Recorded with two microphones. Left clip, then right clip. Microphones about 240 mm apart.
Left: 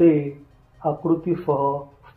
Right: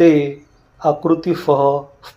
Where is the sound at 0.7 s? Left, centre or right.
Right.